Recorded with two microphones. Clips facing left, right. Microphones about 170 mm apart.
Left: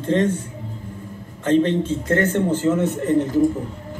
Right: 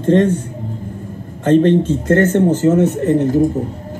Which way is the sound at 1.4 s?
45° right (ahead or behind).